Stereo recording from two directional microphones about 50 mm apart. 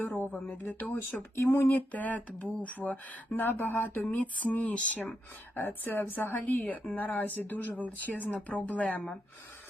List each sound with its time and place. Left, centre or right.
0.5 s speech: left
1.4 s speech: left
1.9 s speech: left
5.5 s speech: left